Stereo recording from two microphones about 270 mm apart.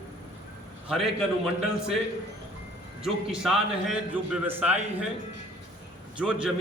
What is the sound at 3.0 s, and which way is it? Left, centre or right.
A man's voice, centre.